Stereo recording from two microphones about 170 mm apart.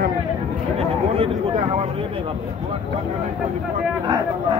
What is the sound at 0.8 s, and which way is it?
Speech, 35° right (ahead or behind).